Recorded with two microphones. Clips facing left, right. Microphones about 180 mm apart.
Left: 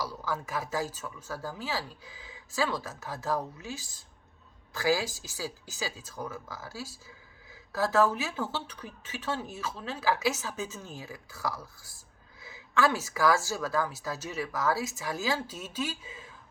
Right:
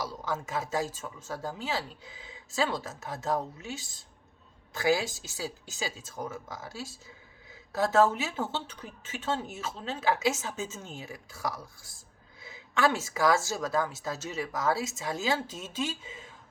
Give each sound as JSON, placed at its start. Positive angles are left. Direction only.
{"t": 0.0, "sound": "a woman's voice", "side_deg": -25}